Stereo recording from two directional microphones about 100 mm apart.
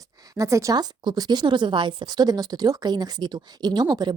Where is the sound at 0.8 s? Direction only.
45° right (ahead or behind).